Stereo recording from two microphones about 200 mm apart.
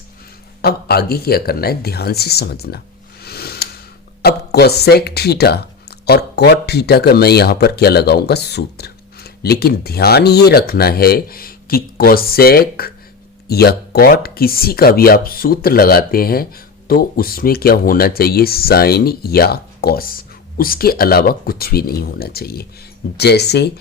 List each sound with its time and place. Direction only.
0.6 s speech: 50° left (ahead or behind)
3.2 s a sound: 50° left (ahead or behind)
4.2 s speech: 55° left (ahead or behind)